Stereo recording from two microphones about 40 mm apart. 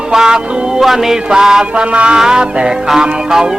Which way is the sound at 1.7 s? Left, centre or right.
Right.